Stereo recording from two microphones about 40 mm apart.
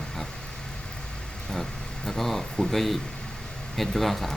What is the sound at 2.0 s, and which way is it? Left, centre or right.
Speech, centre.